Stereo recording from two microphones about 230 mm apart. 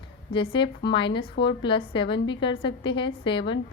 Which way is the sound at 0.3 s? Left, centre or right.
Left.